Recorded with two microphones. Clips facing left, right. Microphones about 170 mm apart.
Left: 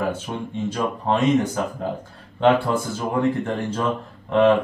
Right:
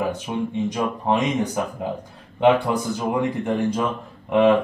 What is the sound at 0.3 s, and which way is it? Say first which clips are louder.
Speech: right 3 dB; 10° right (ahead or behind).